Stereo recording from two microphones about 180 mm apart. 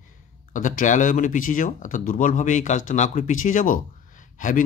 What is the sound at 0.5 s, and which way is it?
Speech, 45° left (ahead or behind).